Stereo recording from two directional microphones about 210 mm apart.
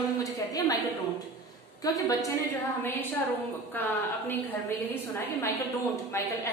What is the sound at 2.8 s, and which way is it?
A woman's voice, 10° left (ahead or behind).